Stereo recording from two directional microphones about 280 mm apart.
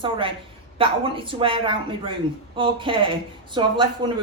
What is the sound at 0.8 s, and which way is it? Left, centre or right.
A man's voice, centre.